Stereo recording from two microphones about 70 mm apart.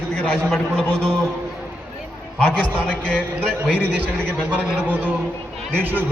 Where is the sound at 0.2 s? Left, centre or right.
Left.